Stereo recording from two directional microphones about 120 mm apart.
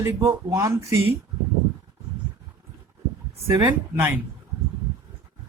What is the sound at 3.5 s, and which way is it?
Speech, 15° right (ahead or behind).